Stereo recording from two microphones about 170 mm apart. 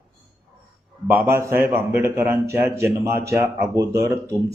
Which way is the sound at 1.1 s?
15° right (ahead or behind).